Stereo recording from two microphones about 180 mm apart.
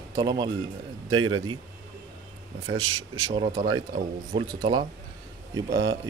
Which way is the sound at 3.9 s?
45° right (ahead or behind).